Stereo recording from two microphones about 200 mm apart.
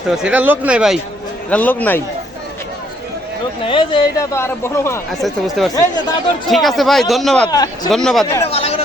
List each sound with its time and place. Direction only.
0.2 s a man's voice: 5° right (ahead or behind)
1.5 s speech: 10° left (ahead or behind)
3.6 s speech: 25° left (ahead or behind)
5.1 s a man's voice: centre (ahead or behind)
7.4 s speech: 20° left (ahead or behind)
7.9 s a man's voice: centre (ahead or behind)
8.4 s chatter: 30° left (ahead or behind)